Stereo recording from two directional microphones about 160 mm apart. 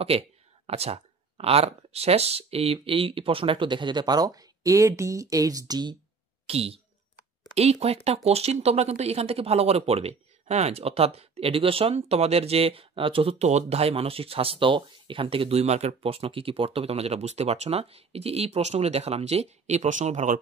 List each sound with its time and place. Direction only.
0.7 s speech: 40° right (ahead or behind)
6.4 s speech: 40° right (ahead or behind)